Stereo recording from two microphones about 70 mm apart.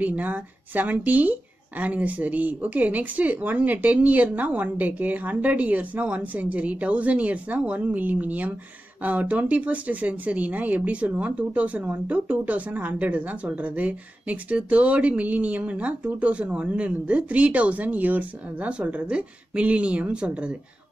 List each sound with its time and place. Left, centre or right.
0.0 s speech: right